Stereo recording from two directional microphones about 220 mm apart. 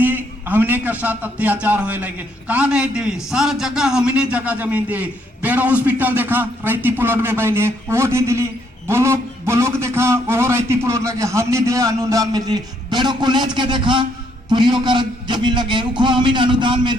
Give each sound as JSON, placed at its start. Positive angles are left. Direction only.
{"t": 0.0, "sound": "a man's voice", "side_deg": -10}